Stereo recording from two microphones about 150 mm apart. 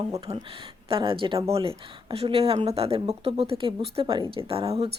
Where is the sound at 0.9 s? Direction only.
35° right (ahead or behind).